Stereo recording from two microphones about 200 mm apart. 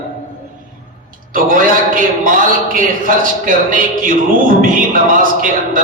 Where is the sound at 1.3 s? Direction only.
45° right (ahead or behind).